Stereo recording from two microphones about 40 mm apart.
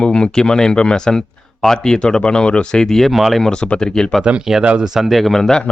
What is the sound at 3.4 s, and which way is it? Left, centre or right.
Speech, centre.